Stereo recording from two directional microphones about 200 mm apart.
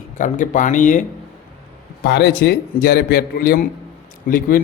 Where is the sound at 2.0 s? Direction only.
55° left (ahead or behind).